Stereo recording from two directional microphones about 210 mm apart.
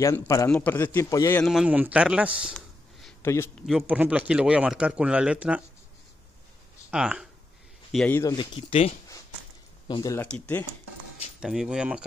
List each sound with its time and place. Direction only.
0.0 s a man's voice: 15° left (ahead or behind)
1.5 s a man's voice: 5° right (ahead or behind)
3.2 s a man's voice: 10° left (ahead or behind)
3.6 s speech: 5° right (ahead or behind)
6.9 s speech: 5° right (ahead or behind)
7.9 s speech: 5° left (ahead or behind)
10.2 s speech: 5° left (ahead or behind)